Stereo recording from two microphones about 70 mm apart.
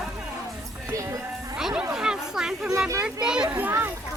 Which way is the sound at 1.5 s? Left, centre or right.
Centre.